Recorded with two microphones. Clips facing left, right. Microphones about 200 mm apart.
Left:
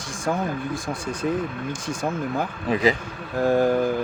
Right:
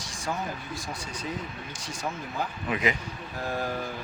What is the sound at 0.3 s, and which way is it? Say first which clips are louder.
Speech: left 8 dB; 50° left (ahead or behind).